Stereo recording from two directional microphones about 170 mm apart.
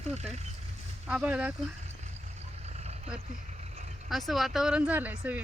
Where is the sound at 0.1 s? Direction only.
40° right (ahead or behind).